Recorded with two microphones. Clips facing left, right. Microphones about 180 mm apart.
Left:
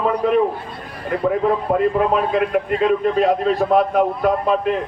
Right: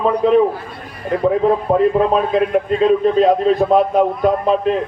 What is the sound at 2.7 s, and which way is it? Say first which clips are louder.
A man's voice: right 4 dB; 25° right (ahead or behind).